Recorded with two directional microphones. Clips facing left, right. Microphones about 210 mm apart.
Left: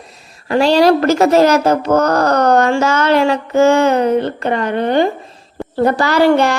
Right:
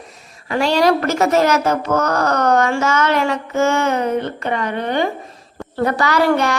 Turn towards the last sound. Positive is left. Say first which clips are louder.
# left 4 dB
turn(degrees=30)  # may be behind; listen again after turning